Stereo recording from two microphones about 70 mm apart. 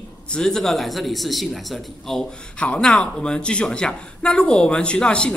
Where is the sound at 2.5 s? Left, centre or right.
Centre.